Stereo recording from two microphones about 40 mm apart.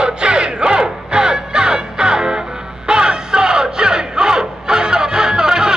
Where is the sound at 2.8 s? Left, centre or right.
Right.